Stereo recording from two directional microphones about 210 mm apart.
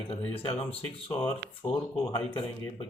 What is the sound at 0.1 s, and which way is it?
Speech, 30° left (ahead or behind).